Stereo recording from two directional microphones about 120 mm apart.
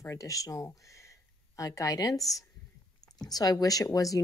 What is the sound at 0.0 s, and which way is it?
Speech, 25° left (ahead or behind).